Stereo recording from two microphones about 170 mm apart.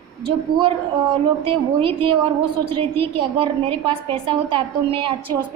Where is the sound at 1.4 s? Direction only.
30° right (ahead or behind).